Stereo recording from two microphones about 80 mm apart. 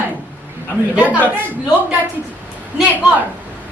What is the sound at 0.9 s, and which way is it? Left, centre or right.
Speech, centre.